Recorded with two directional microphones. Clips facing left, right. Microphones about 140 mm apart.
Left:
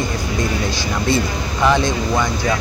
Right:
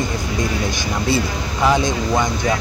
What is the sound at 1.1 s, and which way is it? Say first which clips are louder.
Speech: left 1 dB; 10° right (ahead or behind).